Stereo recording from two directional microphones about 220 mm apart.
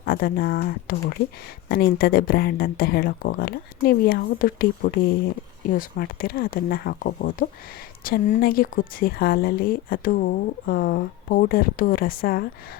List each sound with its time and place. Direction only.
0.0 s a woman's voice: 40° left (ahead or behind)